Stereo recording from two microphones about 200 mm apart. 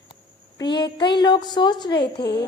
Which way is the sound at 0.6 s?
20° left (ahead or behind).